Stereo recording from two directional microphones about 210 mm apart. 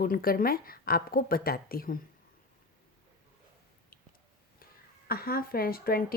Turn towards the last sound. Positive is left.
turn(degrees=45)  # may be behind; listen again after turning